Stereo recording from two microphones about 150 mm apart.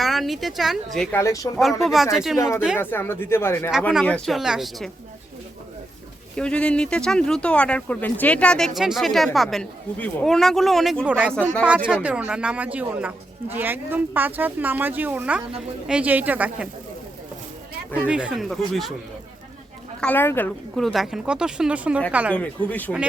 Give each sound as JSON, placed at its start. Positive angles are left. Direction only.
{"t": 0.0, "sound": "speech", "side_deg": 0}
{"t": 1.1, "sound": "speech", "side_deg": 20}
{"t": 1.8, "sound": "speech", "side_deg": 0}
{"t": 2.7, "sound": "speech", "side_deg": 15}
{"t": 4.0, "sound": "speech", "side_deg": 5}
{"t": 6.3, "sound": "speech", "side_deg": 5}
{"t": 18.1, "sound": "speech", "side_deg": -5}
{"t": 20.0, "sound": "speech", "side_deg": 10}
{"t": 20.7, "sound": "speech", "side_deg": 0}
{"t": 22.4, "sound": "speech", "side_deg": 10}